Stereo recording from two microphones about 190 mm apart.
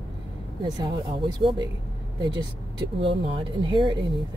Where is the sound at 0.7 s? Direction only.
25° right (ahead or behind).